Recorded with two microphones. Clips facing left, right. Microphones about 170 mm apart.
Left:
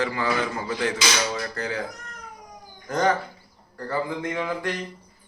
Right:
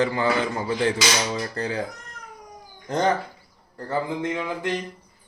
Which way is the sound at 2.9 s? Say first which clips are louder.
Even; 25° right (ahead or behind).